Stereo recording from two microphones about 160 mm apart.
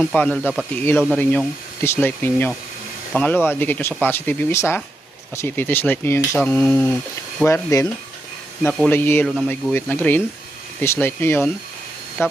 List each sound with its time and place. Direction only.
0.0 s speech: 5° left (ahead or behind)
7.4 s speech: 20° left (ahead or behind)
9.2 s speech: centre (ahead or behind)
9.7 s speech: 10° left (ahead or behind)